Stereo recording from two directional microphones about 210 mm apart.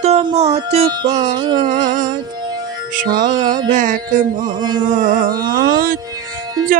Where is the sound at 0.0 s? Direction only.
30° right (ahead or behind).